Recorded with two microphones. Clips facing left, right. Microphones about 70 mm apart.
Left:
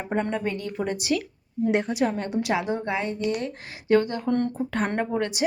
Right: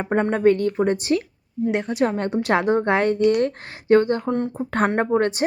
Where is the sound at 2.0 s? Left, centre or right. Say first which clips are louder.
Right 4 dB; right.